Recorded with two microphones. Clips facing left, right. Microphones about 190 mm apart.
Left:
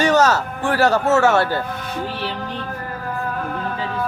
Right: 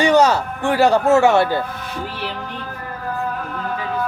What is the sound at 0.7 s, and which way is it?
Speech, 15° right (ahead or behind).